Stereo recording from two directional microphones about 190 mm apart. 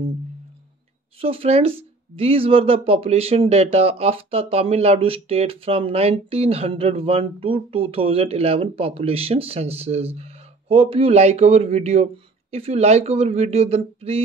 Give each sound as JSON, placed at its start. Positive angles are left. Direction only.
{"t": 1.2, "sound": "speech", "side_deg": -30}